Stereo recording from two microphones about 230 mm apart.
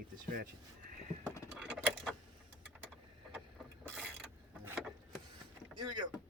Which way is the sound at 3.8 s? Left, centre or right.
Centre.